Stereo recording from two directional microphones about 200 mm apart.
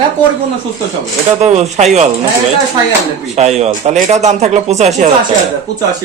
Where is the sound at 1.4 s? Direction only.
35° right (ahead or behind).